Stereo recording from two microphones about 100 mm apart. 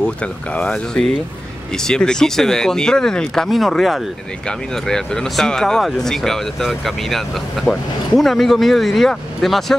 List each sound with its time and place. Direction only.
0.0 s speech: 10° left (ahead or behind)